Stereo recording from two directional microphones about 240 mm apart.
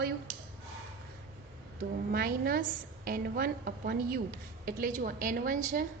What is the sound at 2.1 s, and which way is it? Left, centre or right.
A woman's voice, right.